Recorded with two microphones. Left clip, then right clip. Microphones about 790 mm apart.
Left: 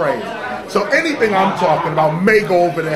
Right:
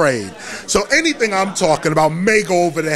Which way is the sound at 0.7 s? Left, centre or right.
Right.